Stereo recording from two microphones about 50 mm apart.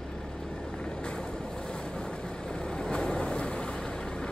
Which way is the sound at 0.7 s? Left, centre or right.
Centre.